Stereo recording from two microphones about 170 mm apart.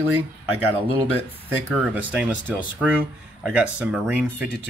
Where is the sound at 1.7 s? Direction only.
5° right (ahead or behind).